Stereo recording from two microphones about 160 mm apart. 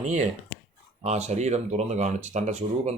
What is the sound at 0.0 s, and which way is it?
Speech, 50° right (ahead or behind).